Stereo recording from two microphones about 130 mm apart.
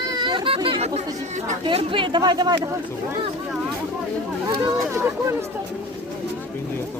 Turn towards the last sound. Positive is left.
turn(degrees=-30)  # may be behind; listen again after turning